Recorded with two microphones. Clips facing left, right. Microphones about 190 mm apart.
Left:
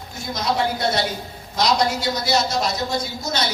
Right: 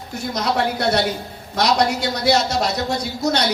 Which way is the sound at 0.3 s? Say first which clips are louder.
Right 1 dB; 65° right (ahead or behind).